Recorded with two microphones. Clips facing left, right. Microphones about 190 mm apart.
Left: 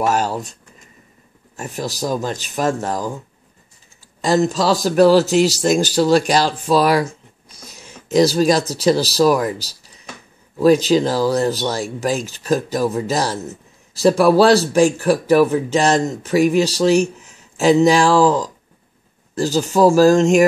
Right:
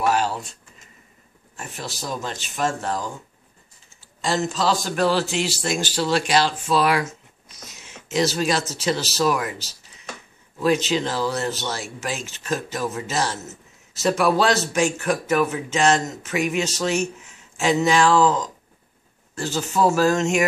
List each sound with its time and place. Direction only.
0.0 s speech: 40° left (ahead or behind)
1.6 s speech: 40° left (ahead or behind)
4.2 s a man's voice: 40° left (ahead or behind)